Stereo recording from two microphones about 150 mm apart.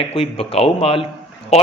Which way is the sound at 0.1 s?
40° left (ahead or behind).